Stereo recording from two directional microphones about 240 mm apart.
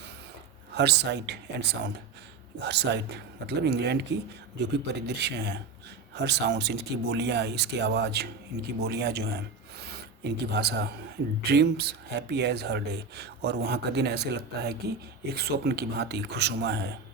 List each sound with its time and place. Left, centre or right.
0.7 s speech: right